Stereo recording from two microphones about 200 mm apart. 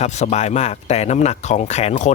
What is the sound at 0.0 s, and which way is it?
Speech, 35° left (ahead or behind).